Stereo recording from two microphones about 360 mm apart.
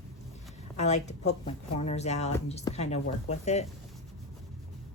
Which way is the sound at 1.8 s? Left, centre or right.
Centre.